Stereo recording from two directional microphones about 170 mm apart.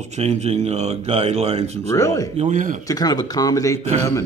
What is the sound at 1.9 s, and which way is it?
Speech, 15° left (ahead or behind).